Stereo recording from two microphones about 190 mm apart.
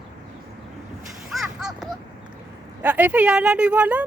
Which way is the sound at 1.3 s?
Centre (ahead or behind).